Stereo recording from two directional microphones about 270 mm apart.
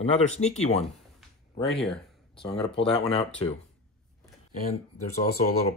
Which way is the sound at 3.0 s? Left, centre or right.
Left.